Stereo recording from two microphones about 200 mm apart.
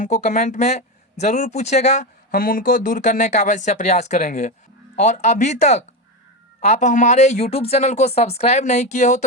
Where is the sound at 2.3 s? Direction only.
45° left (ahead or behind).